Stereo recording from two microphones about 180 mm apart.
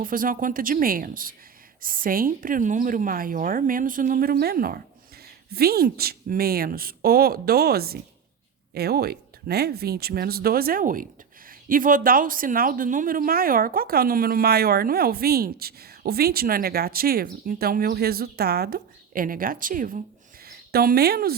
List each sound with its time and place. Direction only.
0.0 s a woman's voice: 50° right (ahead or behind)